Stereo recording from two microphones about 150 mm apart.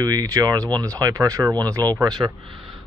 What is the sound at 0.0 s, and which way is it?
Speech, 25° right (ahead or behind).